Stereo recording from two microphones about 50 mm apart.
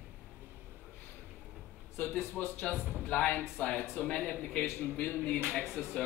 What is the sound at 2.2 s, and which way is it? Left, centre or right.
Speech, left.